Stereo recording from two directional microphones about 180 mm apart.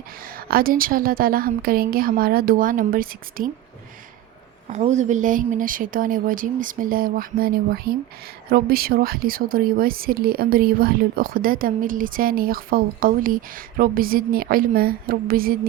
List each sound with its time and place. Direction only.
0.3 s speech: 55° right (ahead or behind)
4.7 s speech: 40° right (ahead or behind)